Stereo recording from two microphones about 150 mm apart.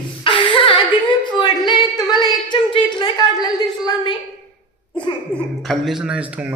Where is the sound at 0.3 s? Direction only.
35° left (ahead or behind).